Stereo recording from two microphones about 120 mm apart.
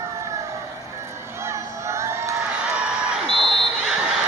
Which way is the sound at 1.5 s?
25° right (ahead or behind).